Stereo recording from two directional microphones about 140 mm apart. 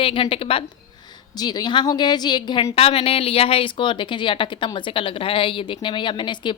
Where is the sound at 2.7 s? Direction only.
45° left (ahead or behind).